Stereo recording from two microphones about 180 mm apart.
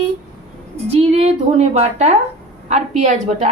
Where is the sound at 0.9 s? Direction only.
35° right (ahead or behind).